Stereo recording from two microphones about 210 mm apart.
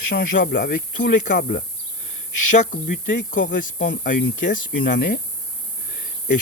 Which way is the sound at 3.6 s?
40° left (ahead or behind).